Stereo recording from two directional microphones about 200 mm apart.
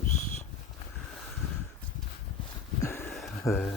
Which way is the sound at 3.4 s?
10° left (ahead or behind).